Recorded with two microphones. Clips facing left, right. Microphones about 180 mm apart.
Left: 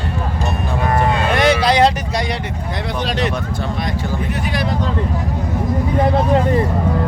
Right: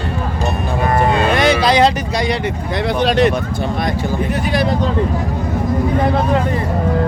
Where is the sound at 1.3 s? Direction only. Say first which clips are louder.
Left 1 dB; 90° right; by 3.3 s 60° right (ahead or behind).